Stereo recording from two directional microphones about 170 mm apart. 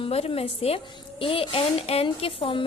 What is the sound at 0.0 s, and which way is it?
Speech, 35° left (ahead or behind).